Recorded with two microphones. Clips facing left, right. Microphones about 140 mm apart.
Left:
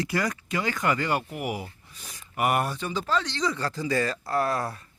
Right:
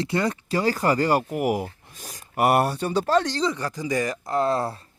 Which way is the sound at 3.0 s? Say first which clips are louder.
Right 7 dB; 50° right (ahead or behind).